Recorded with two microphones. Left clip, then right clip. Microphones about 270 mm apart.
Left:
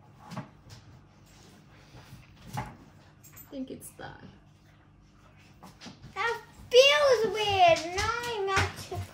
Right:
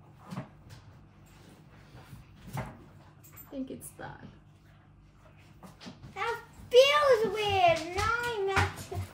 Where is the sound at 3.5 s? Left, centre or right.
Centre.